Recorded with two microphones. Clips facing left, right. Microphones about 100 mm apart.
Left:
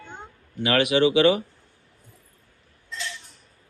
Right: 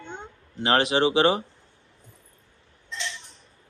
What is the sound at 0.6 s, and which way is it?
Speech, 30° right (ahead or behind).